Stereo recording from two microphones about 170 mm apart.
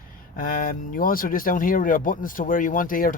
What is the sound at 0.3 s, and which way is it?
Speech, 55° left (ahead or behind).